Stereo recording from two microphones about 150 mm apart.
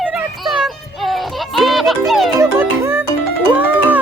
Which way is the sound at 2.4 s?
15° right (ahead or behind).